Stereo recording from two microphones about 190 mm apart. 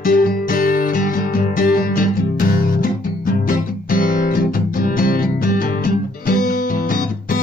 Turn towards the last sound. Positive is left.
turn(degrees=50)  # may be behind; listen again after turning